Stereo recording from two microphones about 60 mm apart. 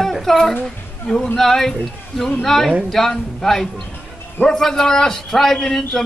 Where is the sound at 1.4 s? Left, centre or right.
Centre.